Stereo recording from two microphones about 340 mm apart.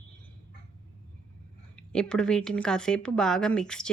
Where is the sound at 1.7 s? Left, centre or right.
Centre.